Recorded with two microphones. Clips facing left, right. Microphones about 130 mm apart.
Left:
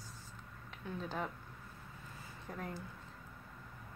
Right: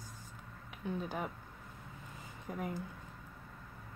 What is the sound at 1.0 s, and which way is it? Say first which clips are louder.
Speech: right 1 dB; 15° right (ahead or behind).